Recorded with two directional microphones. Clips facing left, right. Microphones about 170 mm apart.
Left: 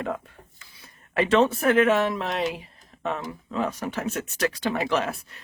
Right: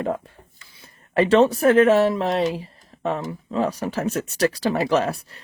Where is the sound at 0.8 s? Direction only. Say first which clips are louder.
Right 5 dB; 35° right (ahead or behind).